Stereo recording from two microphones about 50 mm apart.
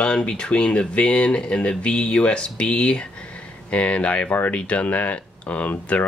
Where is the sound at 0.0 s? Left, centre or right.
Left.